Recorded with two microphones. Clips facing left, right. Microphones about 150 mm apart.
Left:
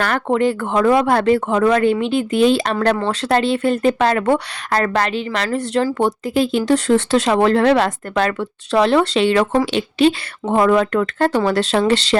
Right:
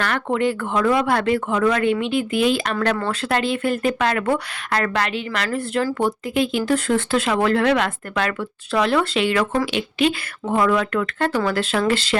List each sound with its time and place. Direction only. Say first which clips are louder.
0.0 s speech: left 4 dB; 40° left (ahead or behind)